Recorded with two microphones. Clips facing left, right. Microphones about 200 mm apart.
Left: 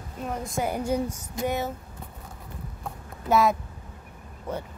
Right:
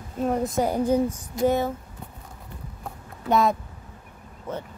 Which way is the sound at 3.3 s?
5° left (ahead or behind).